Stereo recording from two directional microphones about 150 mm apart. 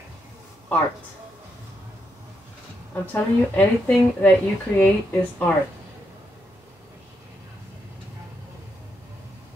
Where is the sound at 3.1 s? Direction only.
10° left (ahead or behind).